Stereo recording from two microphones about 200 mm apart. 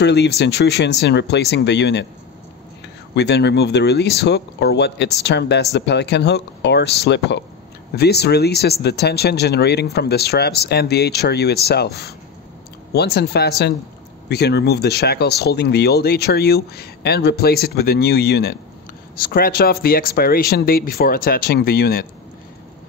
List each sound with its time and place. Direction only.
0.0 s speech: 60° left (ahead or behind)
3.2 s speech: 60° left (ahead or behind)